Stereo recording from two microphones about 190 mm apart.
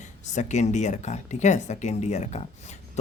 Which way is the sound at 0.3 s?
40° left (ahead or behind).